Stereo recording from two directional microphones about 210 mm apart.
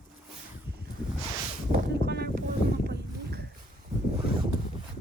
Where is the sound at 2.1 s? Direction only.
50° right (ahead or behind).